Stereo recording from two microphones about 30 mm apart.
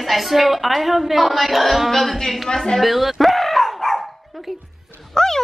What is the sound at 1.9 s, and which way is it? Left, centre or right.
Singing, centre.